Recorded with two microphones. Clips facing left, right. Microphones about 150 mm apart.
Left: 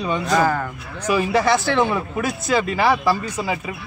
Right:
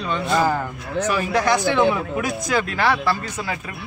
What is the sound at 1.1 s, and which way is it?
Speech, 5° left (ahead or behind).